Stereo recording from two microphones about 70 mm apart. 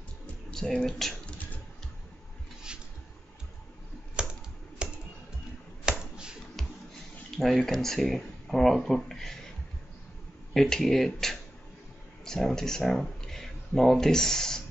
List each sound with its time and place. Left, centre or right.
0.5 s speech: centre
1.2 s a sound: left
4.2 s typing: centre
4.8 s music: centre
5.9 s a sound: centre
7.2 s speech: centre
10.5 s speech: centre